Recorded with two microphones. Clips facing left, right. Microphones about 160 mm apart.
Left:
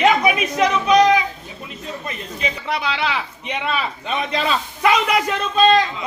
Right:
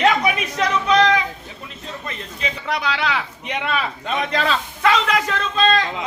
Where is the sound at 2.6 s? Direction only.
5° left (ahead or behind).